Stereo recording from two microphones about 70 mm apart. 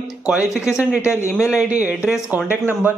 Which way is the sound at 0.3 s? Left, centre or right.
Centre.